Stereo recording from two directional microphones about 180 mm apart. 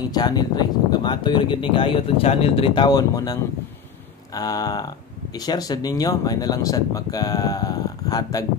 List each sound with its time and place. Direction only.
0.1 s speech: 20° left (ahead or behind)